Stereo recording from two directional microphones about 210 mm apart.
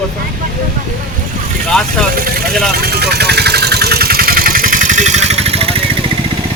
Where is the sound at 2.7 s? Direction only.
50° right (ahead or behind); by 5.7 s 30° right (ahead or behind).